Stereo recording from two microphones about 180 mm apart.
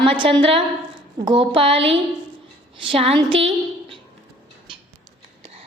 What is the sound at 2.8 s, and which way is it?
Speech, 30° right (ahead or behind).